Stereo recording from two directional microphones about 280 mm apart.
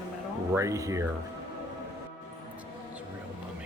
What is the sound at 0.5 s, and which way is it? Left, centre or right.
Speech, centre.